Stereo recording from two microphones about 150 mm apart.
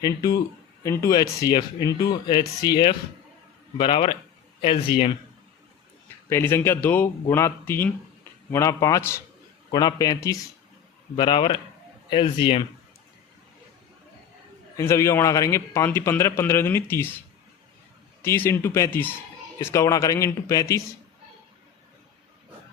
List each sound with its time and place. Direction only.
0.0 s a man's voice: 25° left (ahead or behind)
6.2 s a man's voice: 15° left (ahead or behind); by 12.6 s 35° left (ahead or behind)
14.8 s speech: 20° left (ahead or behind)
18.2 s speech: 15° left (ahead or behind)